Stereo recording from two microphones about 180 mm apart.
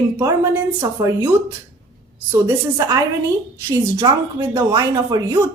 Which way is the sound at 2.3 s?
15° right (ahead or behind).